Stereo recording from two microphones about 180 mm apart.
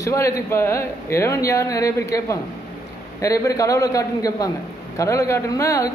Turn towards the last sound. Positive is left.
turn(degrees=15)  # may be behind; listen again after turning